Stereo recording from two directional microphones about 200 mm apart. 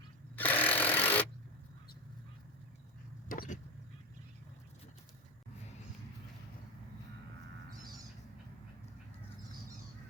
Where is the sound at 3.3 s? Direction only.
45° left (ahead or behind).